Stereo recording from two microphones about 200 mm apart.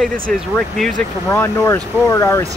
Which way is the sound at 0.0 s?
Centre (ahead or behind).